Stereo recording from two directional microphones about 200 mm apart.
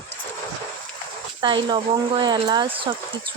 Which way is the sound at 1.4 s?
25° right (ahead or behind).